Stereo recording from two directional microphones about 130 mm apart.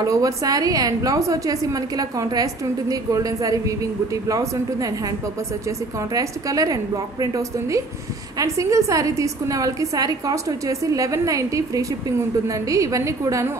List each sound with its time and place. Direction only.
0.0 s a woman's voice: 25° right (ahead or behind)